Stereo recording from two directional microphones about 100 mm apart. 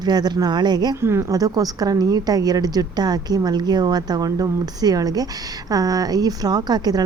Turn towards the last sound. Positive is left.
turn(degrees=-45)  # may be behind; listen again after turning